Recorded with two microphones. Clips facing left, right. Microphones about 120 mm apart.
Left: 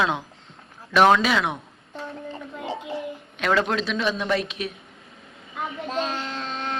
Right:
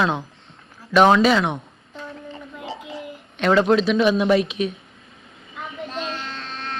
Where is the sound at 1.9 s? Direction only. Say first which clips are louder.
Left 1 dB; 30° left (ahead or behind).